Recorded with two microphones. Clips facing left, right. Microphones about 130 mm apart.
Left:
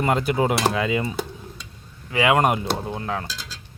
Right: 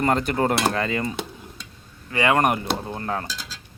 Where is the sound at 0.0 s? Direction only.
5° left (ahead or behind).